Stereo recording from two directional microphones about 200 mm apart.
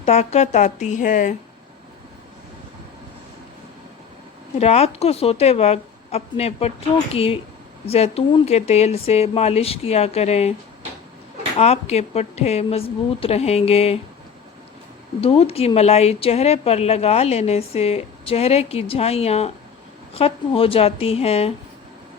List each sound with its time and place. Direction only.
0.0 s a woman's voice: 35° left (ahead or behind)
4.5 s a woman's voice: 30° left (ahead or behind)
11.5 s a woman's voice: 30° left (ahead or behind)
15.2 s a woman's voice: 30° left (ahead or behind)